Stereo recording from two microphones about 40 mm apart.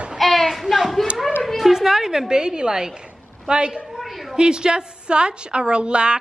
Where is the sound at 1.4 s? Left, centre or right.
Centre.